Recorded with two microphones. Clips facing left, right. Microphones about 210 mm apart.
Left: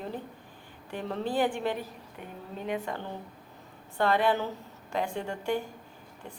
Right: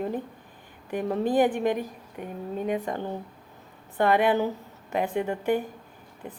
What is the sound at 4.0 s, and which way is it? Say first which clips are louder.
A woman's voice: right 4 dB; 15° right (ahead or behind).